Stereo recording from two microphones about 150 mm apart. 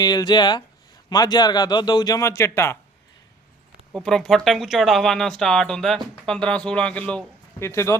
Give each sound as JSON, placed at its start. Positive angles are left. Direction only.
{"t": 0.0, "sound": "a man's voice", "side_deg": 25}
{"t": 3.9, "sound": "speech", "side_deg": 5}
{"t": 7.6, "sound": "a man's voice", "side_deg": 20}